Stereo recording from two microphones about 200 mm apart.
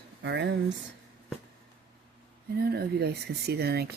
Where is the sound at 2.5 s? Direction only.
50° right (ahead or behind).